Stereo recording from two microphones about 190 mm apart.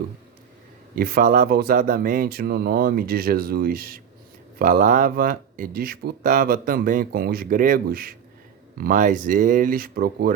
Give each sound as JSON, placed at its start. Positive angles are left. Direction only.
{"t": 0.9, "sound": "speech", "side_deg": -50}